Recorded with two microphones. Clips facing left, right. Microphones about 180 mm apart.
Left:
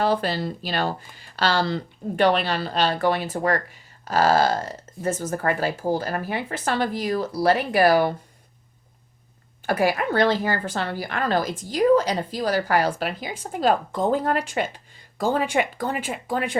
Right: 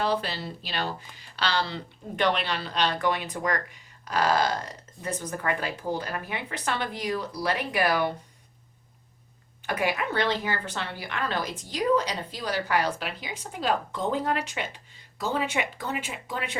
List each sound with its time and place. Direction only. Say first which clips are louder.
0.0 s speech: left 5 dB; 45° left (ahead or behind)
9.6 s speech: left 6 dB; 40° left (ahead or behind)